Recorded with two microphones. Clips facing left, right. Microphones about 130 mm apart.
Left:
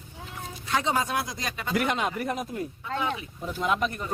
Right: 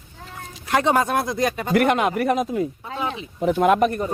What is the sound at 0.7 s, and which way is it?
Speech, 60° right (ahead or behind).